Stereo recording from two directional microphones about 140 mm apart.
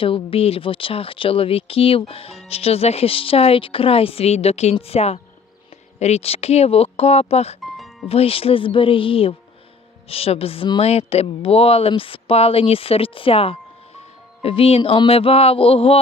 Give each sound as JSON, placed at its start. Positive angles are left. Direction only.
{"t": 0.0, "sound": "speech", "side_deg": 40}